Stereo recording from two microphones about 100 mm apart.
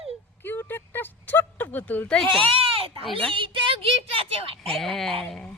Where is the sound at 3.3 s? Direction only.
60° right (ahead or behind).